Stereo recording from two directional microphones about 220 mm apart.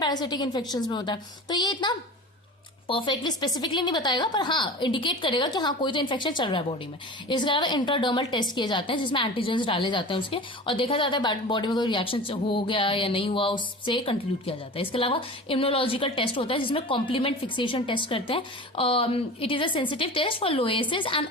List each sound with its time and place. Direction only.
0.0 s a woman's voice: 20° left (ahead or behind)